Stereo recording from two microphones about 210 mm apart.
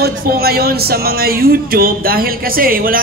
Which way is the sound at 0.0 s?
50° right (ahead or behind).